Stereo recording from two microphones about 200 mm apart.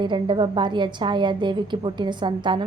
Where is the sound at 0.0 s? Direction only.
25° right (ahead or behind).